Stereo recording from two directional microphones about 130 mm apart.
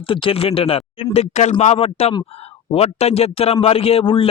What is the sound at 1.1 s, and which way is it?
Speech, 60° left (ahead or behind).